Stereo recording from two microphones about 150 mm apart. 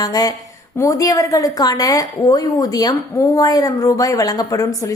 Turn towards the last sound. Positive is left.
turn(degrees=25)  # may be behind; listen again after turning